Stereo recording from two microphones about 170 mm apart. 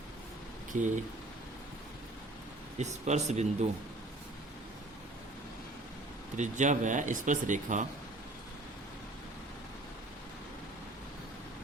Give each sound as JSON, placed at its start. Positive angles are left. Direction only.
{"t": 0.7, "sound": "speech", "side_deg": -45}
{"t": 2.7, "sound": "speech", "side_deg": -45}
{"t": 6.3, "sound": "speech", "side_deg": -45}